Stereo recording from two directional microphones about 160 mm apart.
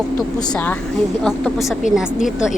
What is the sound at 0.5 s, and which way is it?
A woman's voice, 10° left (ahead or behind).